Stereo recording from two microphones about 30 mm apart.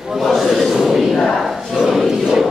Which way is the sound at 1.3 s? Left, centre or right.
Centre.